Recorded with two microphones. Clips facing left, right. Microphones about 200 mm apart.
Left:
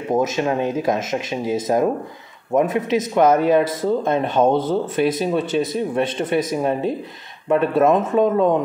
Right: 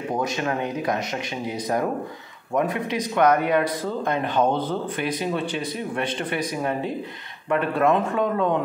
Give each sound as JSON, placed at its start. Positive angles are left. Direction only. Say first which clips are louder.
{"t": 0.1, "sound": "speech", "louder": "left 7 dB", "side_deg": 20}